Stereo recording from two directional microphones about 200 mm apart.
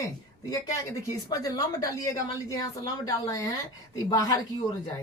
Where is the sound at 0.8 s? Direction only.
15° left (ahead or behind).